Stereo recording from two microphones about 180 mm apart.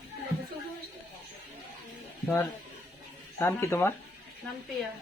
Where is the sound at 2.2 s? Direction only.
15° left (ahead or behind).